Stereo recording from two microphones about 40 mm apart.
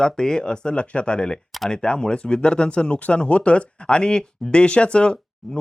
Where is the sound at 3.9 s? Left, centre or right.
Left.